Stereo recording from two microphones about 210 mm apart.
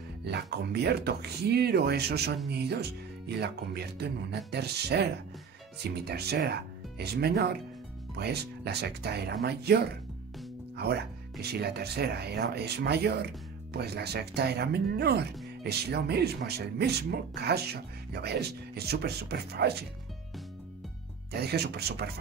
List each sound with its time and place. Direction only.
0.2 s speech: 50° right (ahead or behind)
6.0 s speech: 50° right (ahead or behind)
10.8 s speech: 50° right (ahead or behind)
21.3 s speech: 50° right (ahead or behind)